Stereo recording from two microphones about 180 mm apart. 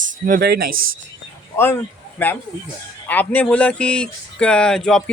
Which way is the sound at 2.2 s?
10° left (ahead or behind).